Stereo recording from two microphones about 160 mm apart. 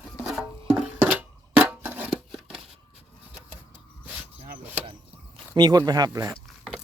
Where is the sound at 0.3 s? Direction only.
5° right (ahead or behind).